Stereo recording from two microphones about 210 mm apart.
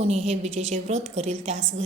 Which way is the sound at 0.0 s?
30° right (ahead or behind).